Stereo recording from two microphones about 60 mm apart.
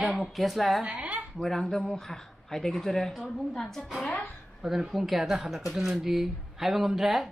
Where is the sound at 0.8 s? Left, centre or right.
Centre.